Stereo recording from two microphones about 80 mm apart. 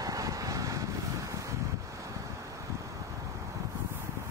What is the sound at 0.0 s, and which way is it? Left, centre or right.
Vehicle, right.